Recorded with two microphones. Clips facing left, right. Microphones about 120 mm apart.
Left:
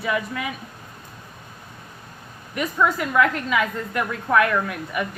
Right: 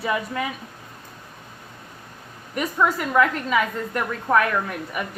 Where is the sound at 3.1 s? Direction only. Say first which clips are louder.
Right 1 dB; 40° right (ahead or behind).